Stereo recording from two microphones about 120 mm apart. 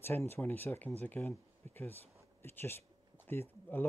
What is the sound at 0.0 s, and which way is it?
Speech, 20° left (ahead or behind).